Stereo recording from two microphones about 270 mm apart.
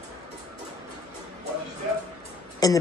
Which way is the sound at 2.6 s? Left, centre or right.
Centre.